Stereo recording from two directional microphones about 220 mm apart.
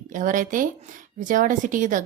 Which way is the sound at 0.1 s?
35° right (ahead or behind).